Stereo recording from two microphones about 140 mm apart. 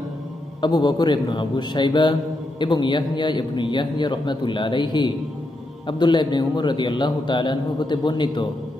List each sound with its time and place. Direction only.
0.6 s a man's voice: 30° left (ahead or behind)